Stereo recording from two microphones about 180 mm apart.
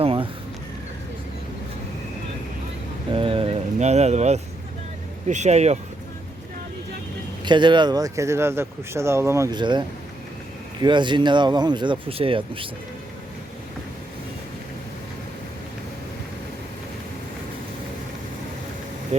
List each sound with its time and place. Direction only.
0.0 s a sound: 30° right (ahead or behind)
3.1 s vehicle: 30° right (ahead or behind)
5.3 s speech: 40° right (ahead or behind)
7.4 s speech: 25° right (ahead or behind)